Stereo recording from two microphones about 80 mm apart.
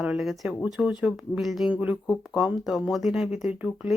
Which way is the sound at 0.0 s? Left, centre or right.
Centre.